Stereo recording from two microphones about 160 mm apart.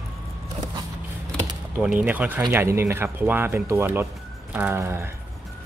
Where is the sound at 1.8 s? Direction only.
10° right (ahead or behind).